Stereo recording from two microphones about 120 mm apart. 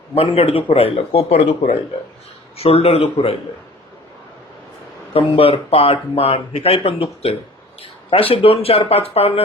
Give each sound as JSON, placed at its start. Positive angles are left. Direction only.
{"t": 0.1, "sound": "speech", "side_deg": 55}
{"t": 5.4, "sound": "speech", "side_deg": 50}